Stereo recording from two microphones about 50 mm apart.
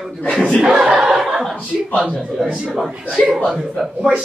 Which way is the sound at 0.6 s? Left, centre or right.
Centre.